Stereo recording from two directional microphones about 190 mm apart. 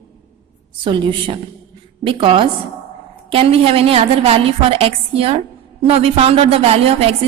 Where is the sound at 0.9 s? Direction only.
25° right (ahead or behind).